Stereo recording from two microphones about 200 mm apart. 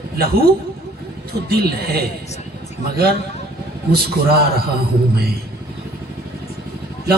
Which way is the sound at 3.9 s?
50° right (ahead or behind).